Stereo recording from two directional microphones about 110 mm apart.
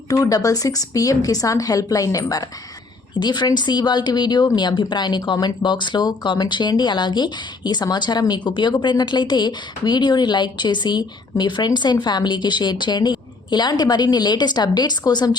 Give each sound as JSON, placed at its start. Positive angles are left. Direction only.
{"t": 0.1, "sound": "speech", "side_deg": 35}